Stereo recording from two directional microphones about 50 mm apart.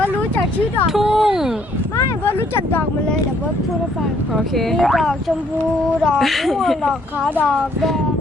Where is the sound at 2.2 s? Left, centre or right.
Left.